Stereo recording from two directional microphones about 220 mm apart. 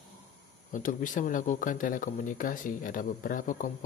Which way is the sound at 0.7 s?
35° left (ahead or behind).